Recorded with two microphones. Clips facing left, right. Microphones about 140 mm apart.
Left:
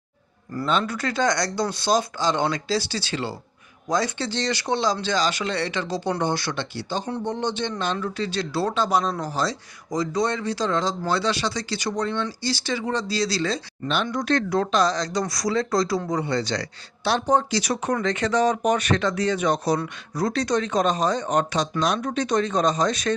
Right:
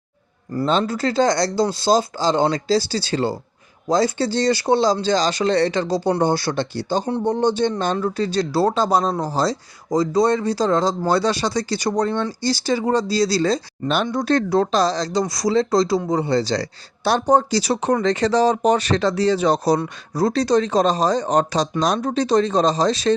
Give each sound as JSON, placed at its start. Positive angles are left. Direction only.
{"t": 0.5, "sound": "speech", "side_deg": -30}